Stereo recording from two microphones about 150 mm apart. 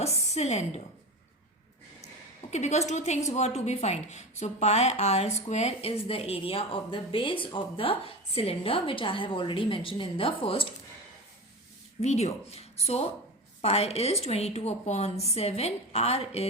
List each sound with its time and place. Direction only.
0.0 s a sound: 45° left (ahead or behind)
2.5 s a woman's voice: 50° left (ahead or behind)
12.0 s a woman's voice: 45° left (ahead or behind)